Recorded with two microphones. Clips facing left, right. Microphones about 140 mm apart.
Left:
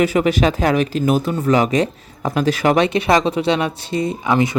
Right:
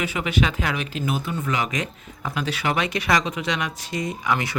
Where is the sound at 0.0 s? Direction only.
40° left (ahead or behind).